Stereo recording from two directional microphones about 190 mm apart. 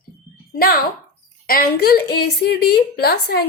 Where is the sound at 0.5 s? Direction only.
55° left (ahead or behind).